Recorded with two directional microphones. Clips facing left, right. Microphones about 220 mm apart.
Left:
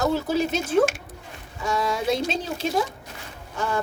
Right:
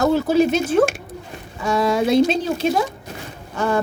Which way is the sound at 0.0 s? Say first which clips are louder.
Right 7 dB; 65° right (ahead or behind).